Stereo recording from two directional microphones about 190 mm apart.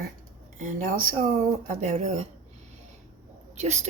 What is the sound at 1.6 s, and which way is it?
Speech, 35° right (ahead or behind).